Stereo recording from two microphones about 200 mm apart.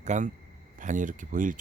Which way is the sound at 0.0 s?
35° right (ahead or behind).